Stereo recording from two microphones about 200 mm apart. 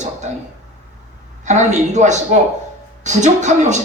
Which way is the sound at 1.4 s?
35° right (ahead or behind).